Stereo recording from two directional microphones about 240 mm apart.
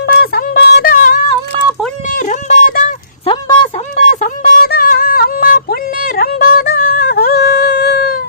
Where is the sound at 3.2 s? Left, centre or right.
Centre.